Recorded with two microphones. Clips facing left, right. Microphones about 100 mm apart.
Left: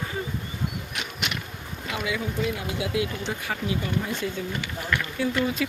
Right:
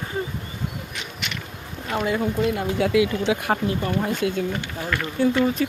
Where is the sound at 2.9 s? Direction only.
80° right.